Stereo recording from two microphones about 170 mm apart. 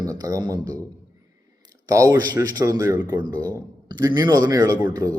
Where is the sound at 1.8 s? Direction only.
20° right (ahead or behind).